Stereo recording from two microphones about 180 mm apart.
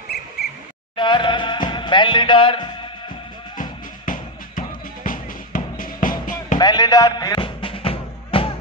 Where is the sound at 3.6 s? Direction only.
45° left (ahead or behind).